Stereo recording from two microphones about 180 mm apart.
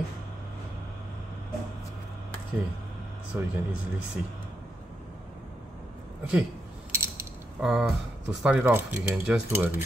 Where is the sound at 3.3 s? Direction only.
10° right (ahead or behind).